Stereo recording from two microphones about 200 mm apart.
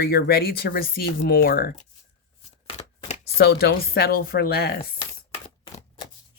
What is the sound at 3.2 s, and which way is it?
Speech, 55° left (ahead or behind).